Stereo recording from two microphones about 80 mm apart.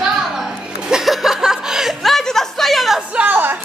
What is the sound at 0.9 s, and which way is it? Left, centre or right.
Chuckle, centre.